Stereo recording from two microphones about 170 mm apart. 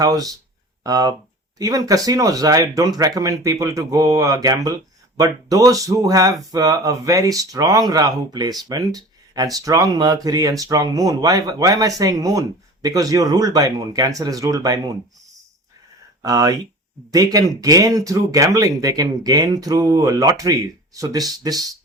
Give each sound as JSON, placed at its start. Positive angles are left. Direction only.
{"t": 0.0, "sound": "speech", "side_deg": -20}
{"t": 16.2, "sound": "speech", "side_deg": -20}